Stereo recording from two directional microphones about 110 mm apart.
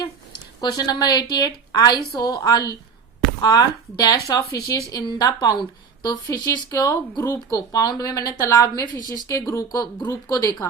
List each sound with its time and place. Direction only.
0.6 s speech: 40° left (ahead or behind)